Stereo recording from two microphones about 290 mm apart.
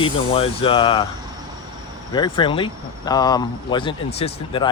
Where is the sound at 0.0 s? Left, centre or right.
Centre.